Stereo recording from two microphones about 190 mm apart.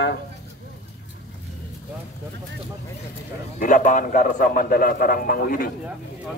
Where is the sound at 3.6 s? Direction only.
45° left (ahead or behind).